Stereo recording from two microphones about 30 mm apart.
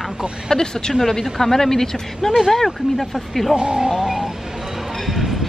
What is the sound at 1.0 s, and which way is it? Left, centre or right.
Speech, centre.